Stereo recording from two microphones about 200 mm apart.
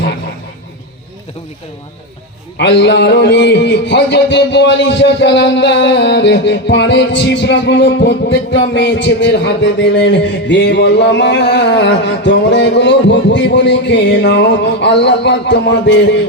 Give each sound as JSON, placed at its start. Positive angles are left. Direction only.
{"t": 2.6, "sound": "music", "side_deg": 60}